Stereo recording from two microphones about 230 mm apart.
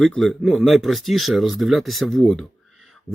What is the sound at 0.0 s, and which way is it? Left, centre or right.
Speech, centre.